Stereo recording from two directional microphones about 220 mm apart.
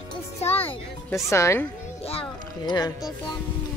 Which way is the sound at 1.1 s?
15° left (ahead or behind).